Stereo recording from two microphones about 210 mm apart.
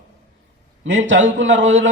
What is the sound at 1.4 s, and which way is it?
Speech, 60° right (ahead or behind).